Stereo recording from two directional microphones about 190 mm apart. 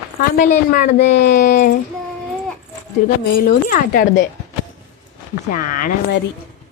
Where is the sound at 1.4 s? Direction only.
40° left (ahead or behind).